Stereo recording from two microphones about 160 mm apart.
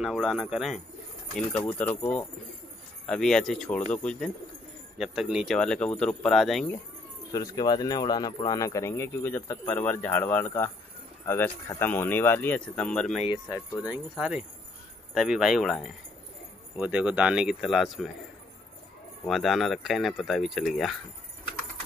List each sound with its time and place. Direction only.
0.0 s speech: 5° right (ahead or behind)
1.3 s speech: 10° left (ahead or behind)
7.3 s speech: 20° left (ahead or behind); by 13.2 s 5° left (ahead or behind)
13.8 s speech: 5° right (ahead or behind)
19.2 s speech: centre (ahead or behind)